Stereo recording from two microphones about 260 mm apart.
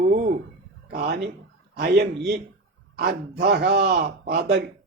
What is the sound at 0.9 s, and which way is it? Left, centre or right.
Speech, right.